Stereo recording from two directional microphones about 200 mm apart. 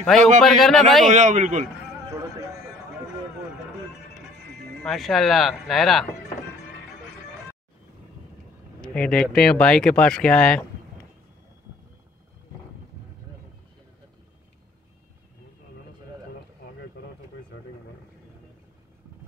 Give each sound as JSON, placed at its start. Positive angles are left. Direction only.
{"t": 0.4, "sound": "speech", "side_deg": 0}
{"t": 1.1, "sound": "speech", "side_deg": -35}
{"t": 4.8, "sound": "speech", "side_deg": 0}
{"t": 8.8, "sound": "speech", "side_deg": 5}